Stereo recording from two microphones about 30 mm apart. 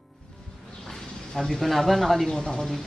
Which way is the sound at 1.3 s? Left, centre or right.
Centre.